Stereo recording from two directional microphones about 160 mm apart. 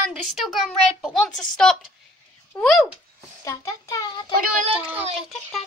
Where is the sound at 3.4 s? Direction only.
20° left (ahead or behind).